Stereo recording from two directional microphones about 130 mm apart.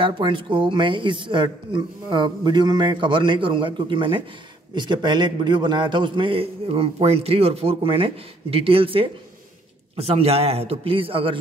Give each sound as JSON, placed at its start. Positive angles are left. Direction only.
{"t": 0.0, "sound": "a man's voice", "side_deg": -40}